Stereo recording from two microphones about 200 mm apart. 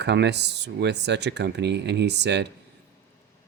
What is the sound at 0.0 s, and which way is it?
Speech, 60° right (ahead or behind).